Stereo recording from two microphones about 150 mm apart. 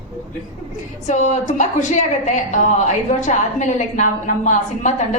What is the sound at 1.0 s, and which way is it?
A woman's voice, 50° left (ahead or behind).